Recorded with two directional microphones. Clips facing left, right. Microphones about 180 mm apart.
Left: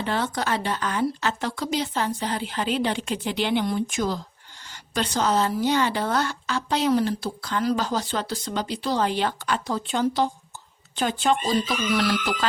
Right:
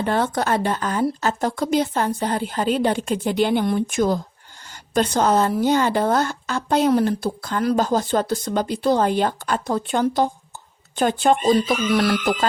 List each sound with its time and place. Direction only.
0.0 s a woman's voice: 50° right (ahead or behind)